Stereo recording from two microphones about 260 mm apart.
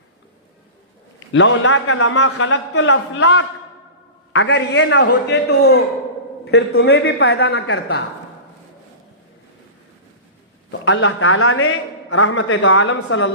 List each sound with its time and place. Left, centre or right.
1.3 s a man's voice: left
10.7 s a man's voice: left